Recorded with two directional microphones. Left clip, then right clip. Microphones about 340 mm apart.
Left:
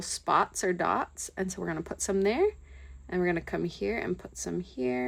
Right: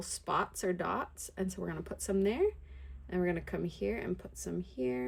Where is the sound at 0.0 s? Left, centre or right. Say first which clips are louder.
Left 7 dB; left.